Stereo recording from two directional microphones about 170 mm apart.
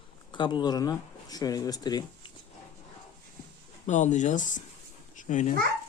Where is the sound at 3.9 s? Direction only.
45° left (ahead or behind).